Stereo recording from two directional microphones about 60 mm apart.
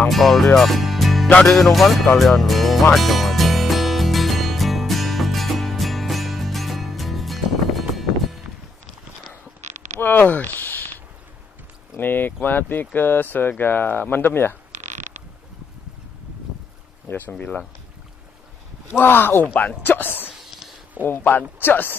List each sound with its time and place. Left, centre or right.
0.1 s music: centre
9.9 s a sound: left
12.0 s speech: left
17.1 s speech: left
18.9 s speech: left
20.2 s whispering: centre
21.0 s speech: left